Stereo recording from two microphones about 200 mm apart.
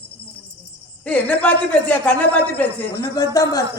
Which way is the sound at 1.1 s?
5° left (ahead or behind).